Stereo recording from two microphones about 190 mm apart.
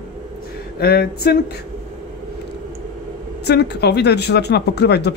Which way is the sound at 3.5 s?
60° left (ahead or behind).